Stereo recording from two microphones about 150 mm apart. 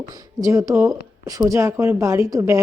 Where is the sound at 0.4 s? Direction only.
20° right (ahead or behind).